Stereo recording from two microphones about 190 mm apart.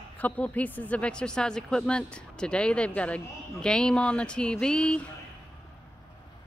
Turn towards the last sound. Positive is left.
turn(degrees=5)  # may be behind; listen again after turning